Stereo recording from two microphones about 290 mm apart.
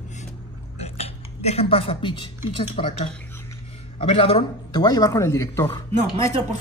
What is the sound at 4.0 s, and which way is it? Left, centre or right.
Speech, centre.